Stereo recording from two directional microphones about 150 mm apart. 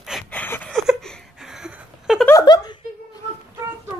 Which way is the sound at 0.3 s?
10° left (ahead or behind).